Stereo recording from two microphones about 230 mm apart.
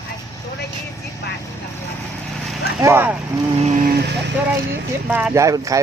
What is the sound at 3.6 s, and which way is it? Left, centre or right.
Vehicle, right.